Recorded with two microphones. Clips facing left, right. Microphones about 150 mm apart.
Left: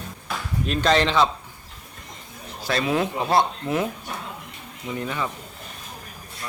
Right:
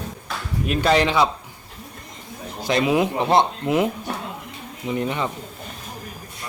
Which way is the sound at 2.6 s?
15° right (ahead or behind).